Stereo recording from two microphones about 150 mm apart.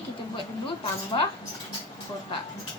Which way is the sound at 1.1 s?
35° left (ahead or behind).